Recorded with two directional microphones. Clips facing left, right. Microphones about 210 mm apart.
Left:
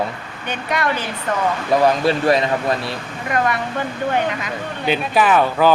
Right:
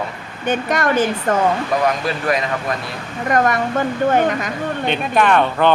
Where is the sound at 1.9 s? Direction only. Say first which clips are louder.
Left 4 dB; 30° left (ahead or behind).